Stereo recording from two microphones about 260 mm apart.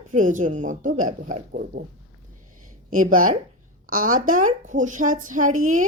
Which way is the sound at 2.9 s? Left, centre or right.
Right.